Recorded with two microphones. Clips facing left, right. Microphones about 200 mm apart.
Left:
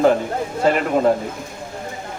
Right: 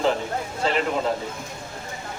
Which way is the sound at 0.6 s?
50° left (ahead or behind).